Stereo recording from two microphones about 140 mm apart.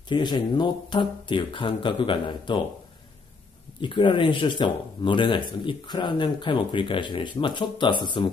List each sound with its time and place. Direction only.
0.1 s speech: 30° left (ahead or behind)
3.8 s speech: 35° left (ahead or behind)